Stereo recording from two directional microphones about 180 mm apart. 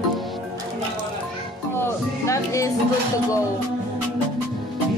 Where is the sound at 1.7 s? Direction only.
15° left (ahead or behind).